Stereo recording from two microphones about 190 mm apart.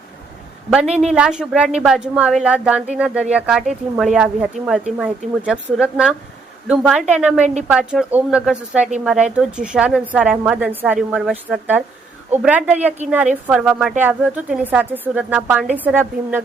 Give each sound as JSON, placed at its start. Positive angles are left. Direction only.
{"t": 1.1, "sound": "a woman's voice", "side_deg": -5}